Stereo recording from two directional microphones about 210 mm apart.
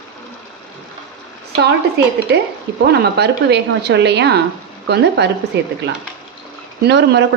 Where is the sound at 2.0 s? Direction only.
50° right (ahead or behind).